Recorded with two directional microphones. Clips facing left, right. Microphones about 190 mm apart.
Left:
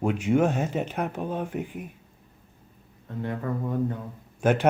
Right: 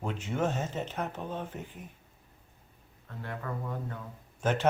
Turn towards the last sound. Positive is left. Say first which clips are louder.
# left 7 dB
turn(degrees=10)  # may be behind; listen again after turning